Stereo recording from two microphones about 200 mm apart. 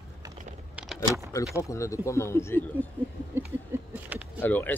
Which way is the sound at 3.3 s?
10° right (ahead or behind).